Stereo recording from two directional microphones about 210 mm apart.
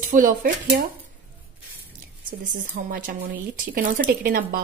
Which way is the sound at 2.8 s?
40° right (ahead or behind).